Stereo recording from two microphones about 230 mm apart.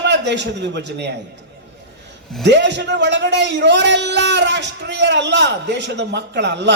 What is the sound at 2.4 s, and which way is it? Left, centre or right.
A man's voice, right.